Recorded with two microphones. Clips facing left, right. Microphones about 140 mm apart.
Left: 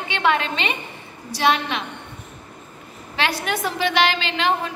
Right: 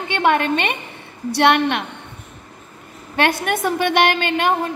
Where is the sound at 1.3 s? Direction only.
65° right (ahead or behind).